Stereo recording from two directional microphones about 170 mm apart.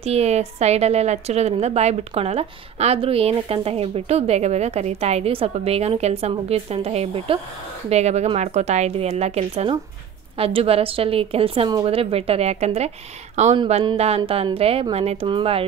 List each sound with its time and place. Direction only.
0.0 s a woman's voice: 40° right (ahead or behind)